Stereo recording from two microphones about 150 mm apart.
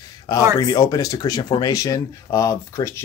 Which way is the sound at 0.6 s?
25° left (ahead or behind).